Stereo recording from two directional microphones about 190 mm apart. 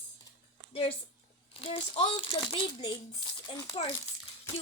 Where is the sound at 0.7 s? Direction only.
30° left (ahead or behind).